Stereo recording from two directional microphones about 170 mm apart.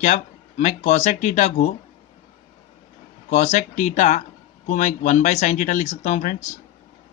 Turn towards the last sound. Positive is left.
turn(degrees=45)  # may be behind; listen again after turning